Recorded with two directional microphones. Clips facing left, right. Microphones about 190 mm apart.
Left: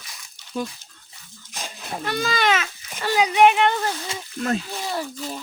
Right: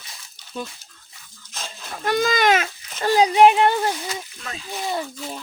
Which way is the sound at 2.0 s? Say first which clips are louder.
Right 4 dB; 45° right (ahead or behind).